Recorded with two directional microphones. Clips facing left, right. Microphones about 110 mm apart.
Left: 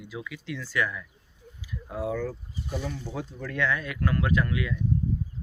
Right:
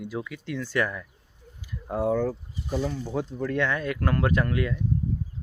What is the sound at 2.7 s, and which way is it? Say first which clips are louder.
Speech: right 5 dB; 30° right (ahead or behind).